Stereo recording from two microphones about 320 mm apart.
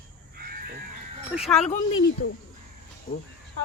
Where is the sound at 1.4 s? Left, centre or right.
Centre.